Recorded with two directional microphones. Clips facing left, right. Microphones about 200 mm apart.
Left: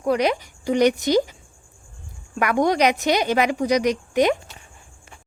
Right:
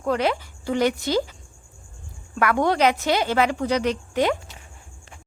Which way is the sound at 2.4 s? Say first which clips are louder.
Left 1 dB; 15° left (ahead or behind).